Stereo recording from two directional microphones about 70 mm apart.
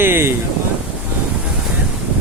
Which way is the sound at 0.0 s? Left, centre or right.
Right.